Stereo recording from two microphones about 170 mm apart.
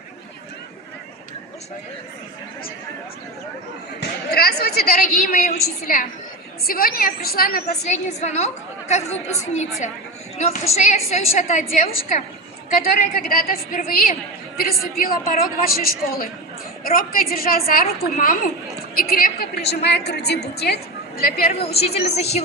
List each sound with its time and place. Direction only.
4.0 s a woman's voice: 65° left (ahead or behind)
4.9 s a woman's voice: 50° left (ahead or behind)
7.9 s a woman's voice: 40° left (ahead or behind); by 20.7 s 75° left (ahead or behind)
21.6 s a woman's voice: 35° left (ahead or behind)